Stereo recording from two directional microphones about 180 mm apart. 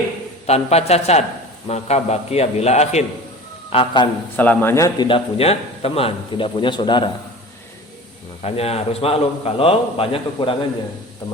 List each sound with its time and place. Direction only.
0.4 s a man's voice: 35° left (ahead or behind)
4.4 s a man's voice: 10° left (ahead or behind)
5.0 s a man's voice: 30° left (ahead or behind)
8.4 s a man's voice: 35° left (ahead or behind)